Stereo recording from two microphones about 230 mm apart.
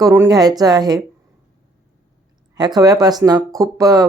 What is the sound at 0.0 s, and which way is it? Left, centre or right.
Speech, centre.